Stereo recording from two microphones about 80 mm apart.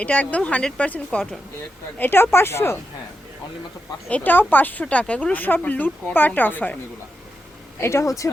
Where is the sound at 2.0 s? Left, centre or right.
Left.